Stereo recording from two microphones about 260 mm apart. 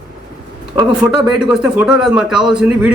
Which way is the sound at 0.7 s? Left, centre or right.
Centre.